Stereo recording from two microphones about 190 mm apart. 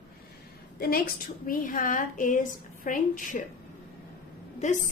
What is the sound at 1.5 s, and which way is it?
Speech, 45° left (ahead or behind).